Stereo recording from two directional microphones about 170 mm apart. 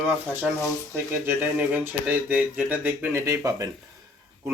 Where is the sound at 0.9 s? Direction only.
10° right (ahead or behind).